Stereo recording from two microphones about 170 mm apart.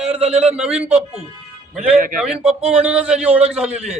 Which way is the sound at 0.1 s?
40° right (ahead or behind).